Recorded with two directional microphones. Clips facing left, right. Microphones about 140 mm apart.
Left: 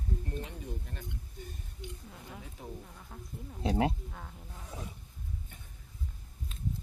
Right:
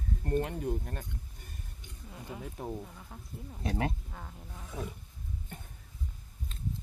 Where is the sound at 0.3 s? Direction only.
60° right (ahead or behind).